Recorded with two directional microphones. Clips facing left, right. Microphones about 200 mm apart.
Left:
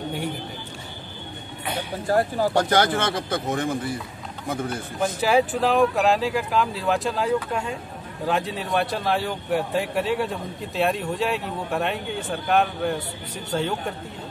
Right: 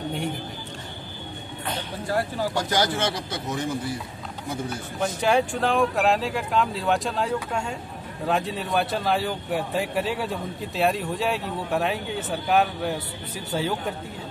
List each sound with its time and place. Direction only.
1.7 s a sound: 10° left (ahead or behind)
2.0 s speech: 45° left (ahead or behind)
5.0 s a man's voice: 5° left (ahead or behind)